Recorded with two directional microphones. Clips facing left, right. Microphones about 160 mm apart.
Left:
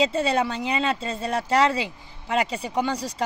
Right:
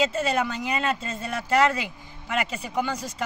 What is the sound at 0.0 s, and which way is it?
Speech, 30° left (ahead or behind).